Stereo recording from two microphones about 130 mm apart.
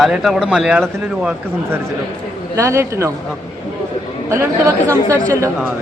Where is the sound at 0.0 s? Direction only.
5° right (ahead or behind).